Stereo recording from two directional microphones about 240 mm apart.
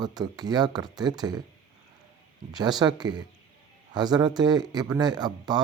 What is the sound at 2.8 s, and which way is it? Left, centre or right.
Speech, centre.